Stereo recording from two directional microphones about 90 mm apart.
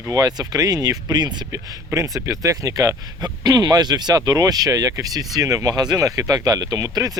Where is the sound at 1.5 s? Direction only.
35° right (ahead or behind).